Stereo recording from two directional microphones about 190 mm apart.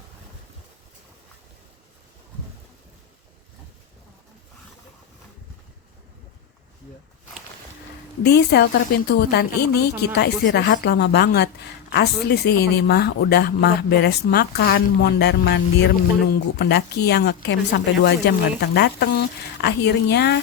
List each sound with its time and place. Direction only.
8.2 s speech: 60° left (ahead or behind)